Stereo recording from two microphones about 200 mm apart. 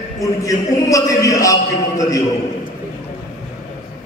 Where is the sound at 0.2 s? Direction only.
15° left (ahead or behind).